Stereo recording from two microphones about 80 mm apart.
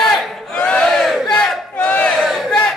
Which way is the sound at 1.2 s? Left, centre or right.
Centre.